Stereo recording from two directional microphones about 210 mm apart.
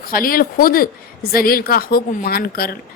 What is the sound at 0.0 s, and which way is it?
A woman's voice, 45° left (ahead or behind).